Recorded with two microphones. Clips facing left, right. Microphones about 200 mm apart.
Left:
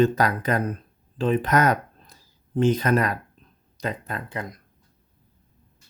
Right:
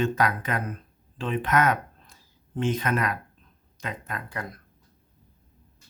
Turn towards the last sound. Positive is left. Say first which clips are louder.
# left 3 dB
turn(degrees=20)  # may be behind; listen again after turning